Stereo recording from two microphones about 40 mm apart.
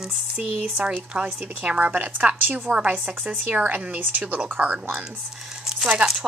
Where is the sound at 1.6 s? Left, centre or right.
Right.